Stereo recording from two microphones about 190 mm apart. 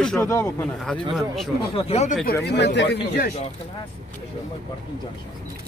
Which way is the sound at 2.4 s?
60° left (ahead or behind).